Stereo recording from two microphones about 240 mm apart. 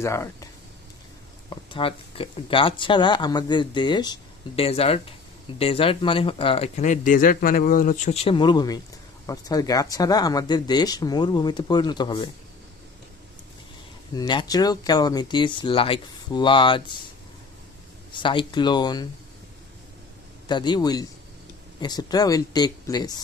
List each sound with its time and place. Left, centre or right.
0.0 s speech: centre
1.5 s speech: left
14.1 s speech: centre
18.1 s speech: centre
20.4 s speech: centre